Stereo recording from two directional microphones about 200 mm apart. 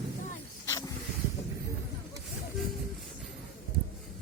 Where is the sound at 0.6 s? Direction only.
15° left (ahead or behind).